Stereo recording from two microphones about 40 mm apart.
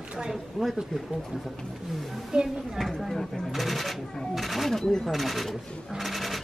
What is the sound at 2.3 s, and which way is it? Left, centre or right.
Speech, centre.